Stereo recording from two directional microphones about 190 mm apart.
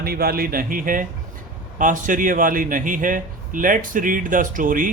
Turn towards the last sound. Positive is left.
turn(degrees=-45)  # may be behind; listen again after turning